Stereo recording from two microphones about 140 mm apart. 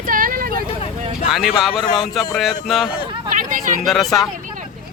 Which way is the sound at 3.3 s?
70° right (ahead or behind).